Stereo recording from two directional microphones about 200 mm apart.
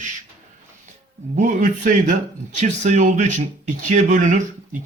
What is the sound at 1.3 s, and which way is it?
Speech, 40° right (ahead or behind).